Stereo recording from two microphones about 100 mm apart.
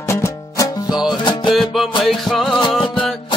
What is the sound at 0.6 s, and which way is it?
Music, 40° left (ahead or behind).